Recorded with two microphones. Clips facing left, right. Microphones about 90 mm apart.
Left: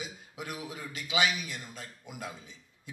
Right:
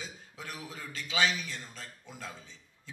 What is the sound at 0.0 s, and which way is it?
A man's voice, 15° left (ahead or behind).